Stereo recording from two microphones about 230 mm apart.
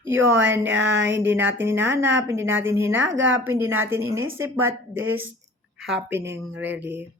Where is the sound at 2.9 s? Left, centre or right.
Right.